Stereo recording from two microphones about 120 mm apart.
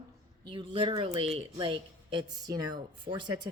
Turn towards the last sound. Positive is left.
turn(degrees=-40)  # may be behind; listen again after turning